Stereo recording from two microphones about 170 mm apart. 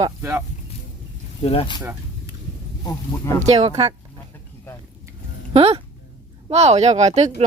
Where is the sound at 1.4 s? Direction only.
30° left (ahead or behind).